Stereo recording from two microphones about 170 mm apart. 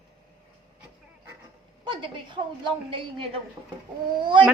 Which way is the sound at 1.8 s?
30° right (ahead or behind).